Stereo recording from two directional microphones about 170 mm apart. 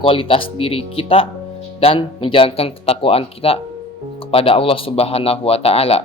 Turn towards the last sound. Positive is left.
turn(degrees=35)  # may be behind; listen again after turning